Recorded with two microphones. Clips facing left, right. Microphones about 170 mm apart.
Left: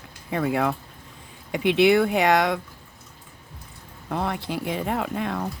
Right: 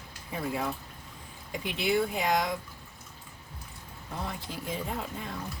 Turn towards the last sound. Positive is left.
turn(degrees=70)  # may be behind; listen again after turning